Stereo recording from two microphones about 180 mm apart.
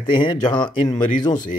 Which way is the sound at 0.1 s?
25° left (ahead or behind).